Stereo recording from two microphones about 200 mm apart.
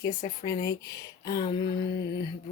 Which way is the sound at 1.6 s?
55° left (ahead or behind).